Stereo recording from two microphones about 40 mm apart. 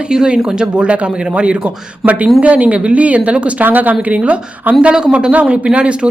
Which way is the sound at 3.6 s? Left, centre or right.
Right.